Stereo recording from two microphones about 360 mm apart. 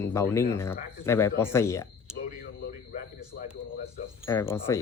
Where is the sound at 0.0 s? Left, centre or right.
Centre.